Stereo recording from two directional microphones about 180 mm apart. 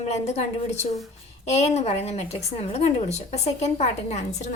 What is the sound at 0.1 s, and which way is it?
Speech, 40° left (ahead or behind).